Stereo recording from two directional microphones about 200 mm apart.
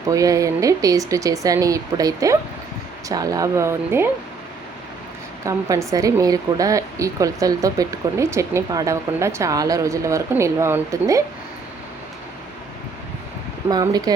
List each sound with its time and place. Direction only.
0.1 s speech: 15° right (ahead or behind)
5.5 s speech: 15° right (ahead or behind)
13.7 s speech: 20° right (ahead or behind)